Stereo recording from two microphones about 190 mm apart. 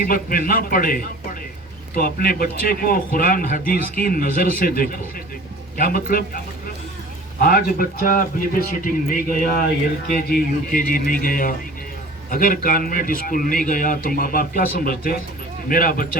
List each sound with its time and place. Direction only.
0.0 s speech: 50° left (ahead or behind)
7.4 s speech: 50° left (ahead or behind)